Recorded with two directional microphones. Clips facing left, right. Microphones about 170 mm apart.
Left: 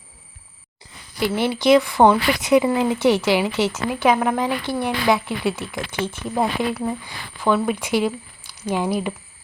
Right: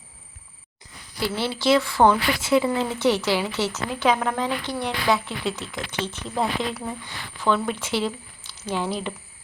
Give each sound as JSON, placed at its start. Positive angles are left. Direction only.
{"t": 1.2, "sound": "speech", "side_deg": 15}